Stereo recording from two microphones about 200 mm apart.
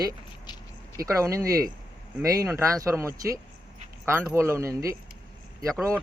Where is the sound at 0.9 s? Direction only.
15° right (ahead or behind).